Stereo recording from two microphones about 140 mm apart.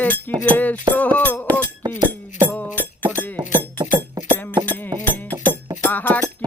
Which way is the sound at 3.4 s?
30° right (ahead or behind).